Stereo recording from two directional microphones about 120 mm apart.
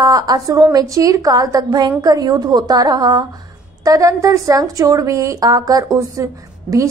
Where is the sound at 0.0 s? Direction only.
30° right (ahead or behind).